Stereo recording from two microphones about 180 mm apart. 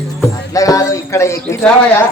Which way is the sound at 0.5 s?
20° left (ahead or behind).